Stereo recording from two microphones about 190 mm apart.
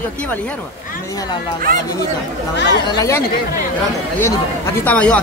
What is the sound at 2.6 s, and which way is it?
Speech, 65° left (ahead or behind).